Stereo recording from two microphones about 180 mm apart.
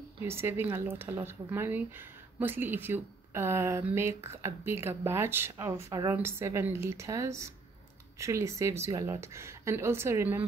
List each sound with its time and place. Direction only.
0.2 s speech: 15° right (ahead or behind)